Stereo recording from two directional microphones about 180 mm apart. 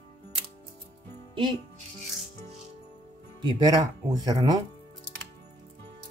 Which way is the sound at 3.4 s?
25° right (ahead or behind).